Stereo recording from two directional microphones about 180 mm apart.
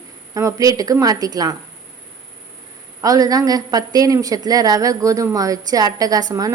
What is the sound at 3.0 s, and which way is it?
A woman's voice, 20° right (ahead or behind).